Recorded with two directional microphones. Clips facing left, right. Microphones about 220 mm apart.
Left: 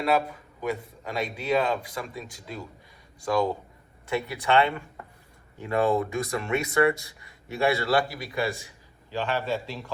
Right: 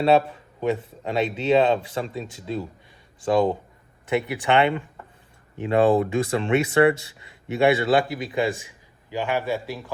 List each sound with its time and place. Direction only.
0.0 s speech: 25° right (ahead or behind)